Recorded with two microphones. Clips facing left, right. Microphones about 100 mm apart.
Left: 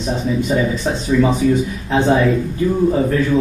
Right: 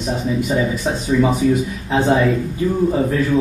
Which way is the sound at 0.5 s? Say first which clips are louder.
Left 1 dB; 10° right (ahead or behind).